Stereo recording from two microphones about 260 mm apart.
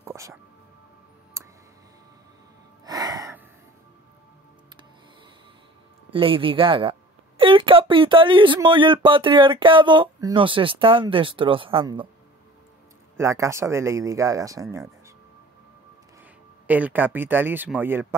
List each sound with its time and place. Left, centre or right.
0.0 s music: centre
2.8 s gasp: centre
6.1 s a woman's voice: centre
13.2 s speech: centre
16.6 s speech: centre